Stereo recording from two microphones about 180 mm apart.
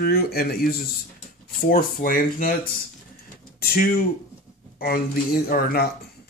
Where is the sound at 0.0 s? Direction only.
60° left (ahead or behind).